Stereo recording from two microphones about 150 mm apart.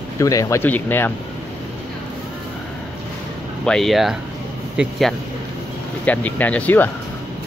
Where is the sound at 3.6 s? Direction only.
5° left (ahead or behind).